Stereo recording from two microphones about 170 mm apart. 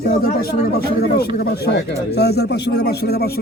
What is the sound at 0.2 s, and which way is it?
Speech, 60° left (ahead or behind).